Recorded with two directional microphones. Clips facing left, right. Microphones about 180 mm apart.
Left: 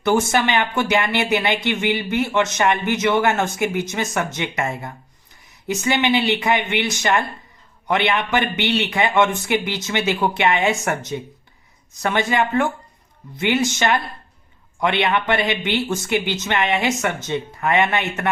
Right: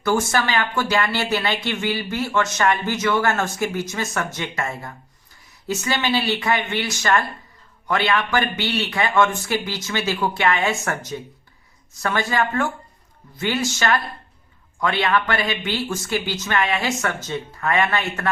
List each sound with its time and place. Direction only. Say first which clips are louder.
0.0 s speech: left 3 dB; 20° left (ahead or behind)